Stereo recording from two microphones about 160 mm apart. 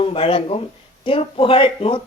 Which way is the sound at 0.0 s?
35° left (ahead or behind).